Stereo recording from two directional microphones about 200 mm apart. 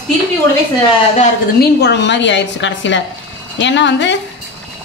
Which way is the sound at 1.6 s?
55° left (ahead or behind).